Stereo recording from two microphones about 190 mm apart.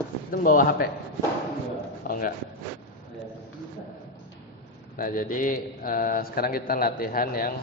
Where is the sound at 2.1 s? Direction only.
50° left (ahead or behind).